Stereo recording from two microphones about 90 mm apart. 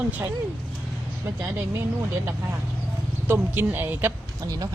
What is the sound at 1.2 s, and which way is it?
Speech, 25° right (ahead or behind).